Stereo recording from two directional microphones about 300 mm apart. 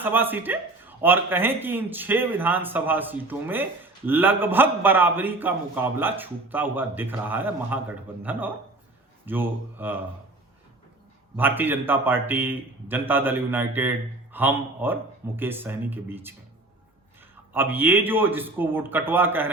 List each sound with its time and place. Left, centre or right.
0.0 s speech: centre
11.3 s speech: centre
17.5 s speech: centre